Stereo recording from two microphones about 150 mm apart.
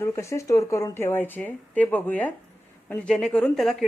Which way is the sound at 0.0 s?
20° left (ahead or behind).